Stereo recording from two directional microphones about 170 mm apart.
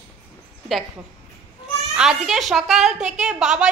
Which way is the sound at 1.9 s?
5° right (ahead or behind).